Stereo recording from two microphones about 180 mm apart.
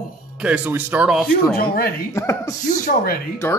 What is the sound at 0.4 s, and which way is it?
Speech, 10° right (ahead or behind).